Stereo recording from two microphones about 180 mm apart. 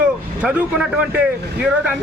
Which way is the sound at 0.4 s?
5° right (ahead or behind).